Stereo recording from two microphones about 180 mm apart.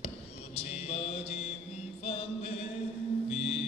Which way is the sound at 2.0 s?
35° left (ahead or behind).